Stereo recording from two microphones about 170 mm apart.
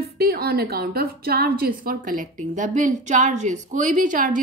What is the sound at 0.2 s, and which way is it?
A woman's voice, 65° right (ahead or behind).